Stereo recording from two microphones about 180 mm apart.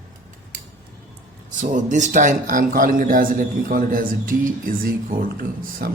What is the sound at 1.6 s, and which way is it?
A man's voice, 45° right (ahead or behind).